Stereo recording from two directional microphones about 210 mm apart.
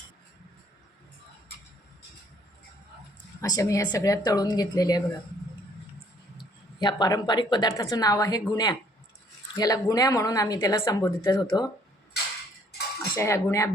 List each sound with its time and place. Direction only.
3.4 s speech: 15° left (ahead or behind)
6.3 s a woman's voice: 20° left (ahead or behind)
13.0 s cutlery: 15° left (ahead or behind)